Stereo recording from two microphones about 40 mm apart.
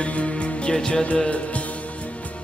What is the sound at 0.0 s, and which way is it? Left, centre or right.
Music, left.